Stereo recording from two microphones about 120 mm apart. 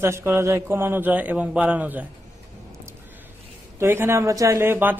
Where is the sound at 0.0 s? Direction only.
20° right (ahead or behind).